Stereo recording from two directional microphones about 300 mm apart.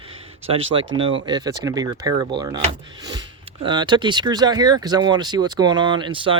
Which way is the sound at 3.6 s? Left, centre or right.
Centre.